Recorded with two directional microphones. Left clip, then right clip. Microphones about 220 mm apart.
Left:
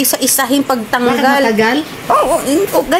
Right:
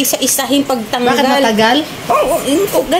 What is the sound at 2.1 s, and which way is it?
Speech, 10° left (ahead or behind).